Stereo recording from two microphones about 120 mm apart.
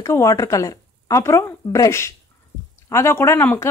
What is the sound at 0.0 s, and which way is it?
Speech, 25° left (ahead or behind).